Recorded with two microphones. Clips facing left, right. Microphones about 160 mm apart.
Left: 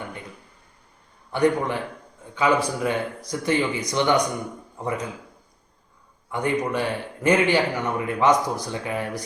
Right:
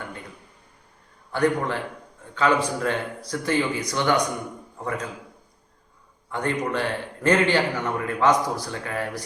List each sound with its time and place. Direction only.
1.3 s a man's voice: 15° left (ahead or behind)
6.3 s a man's voice: 15° left (ahead or behind)